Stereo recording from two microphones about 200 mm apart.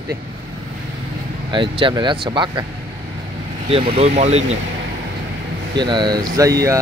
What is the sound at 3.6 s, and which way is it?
Speech, 30° right (ahead or behind).